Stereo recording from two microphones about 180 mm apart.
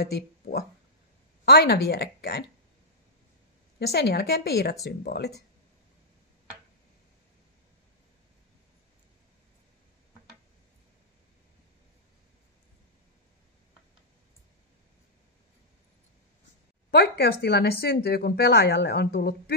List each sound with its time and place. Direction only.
0.0 s a woman's voice: 60° left (ahead or behind)
3.8 s a woman's voice: 60° left (ahead or behind)
16.9 s a woman's voice: 65° left (ahead or behind)